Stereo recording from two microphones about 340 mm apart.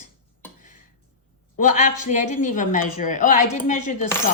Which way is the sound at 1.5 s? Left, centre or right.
Left.